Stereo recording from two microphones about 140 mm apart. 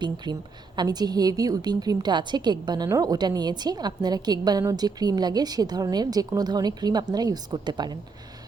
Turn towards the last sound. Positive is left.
turn(degrees=-30)  # may be behind; listen again after turning